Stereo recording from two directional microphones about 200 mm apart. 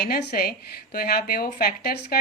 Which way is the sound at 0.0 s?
50° left (ahead or behind).